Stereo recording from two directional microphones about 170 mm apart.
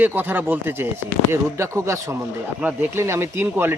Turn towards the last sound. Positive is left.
turn(degrees=-15)  # may be behind; listen again after turning